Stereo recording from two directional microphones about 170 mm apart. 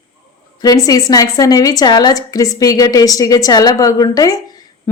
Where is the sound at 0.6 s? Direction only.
20° left (ahead or behind).